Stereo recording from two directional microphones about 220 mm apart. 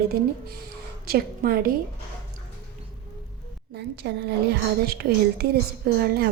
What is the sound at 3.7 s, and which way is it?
A woman's voice, 50° right (ahead or behind).